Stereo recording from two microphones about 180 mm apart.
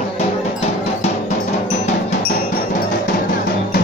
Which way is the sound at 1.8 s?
45° left (ahead or behind).